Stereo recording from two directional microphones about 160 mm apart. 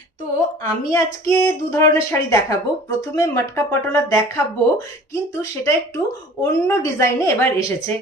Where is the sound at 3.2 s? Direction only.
15° left (ahead or behind).